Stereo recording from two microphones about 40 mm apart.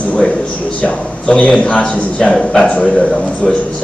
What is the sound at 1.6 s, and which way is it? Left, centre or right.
Speech, left.